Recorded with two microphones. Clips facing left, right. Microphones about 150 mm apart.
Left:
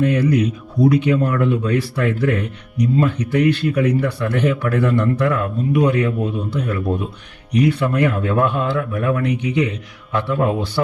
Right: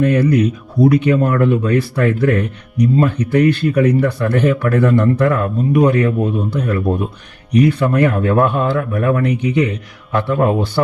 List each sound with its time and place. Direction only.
0.0 s speech: 50° right (ahead or behind)